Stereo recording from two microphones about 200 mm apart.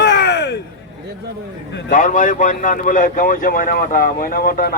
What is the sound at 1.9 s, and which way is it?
Speech, 40° left (ahead or behind).